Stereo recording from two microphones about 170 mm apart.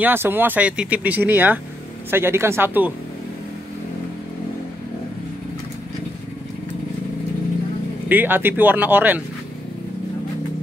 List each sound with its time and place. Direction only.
0.0 s speech: 10° right (ahead or behind)
8.1 s speech: 10° right (ahead or behind)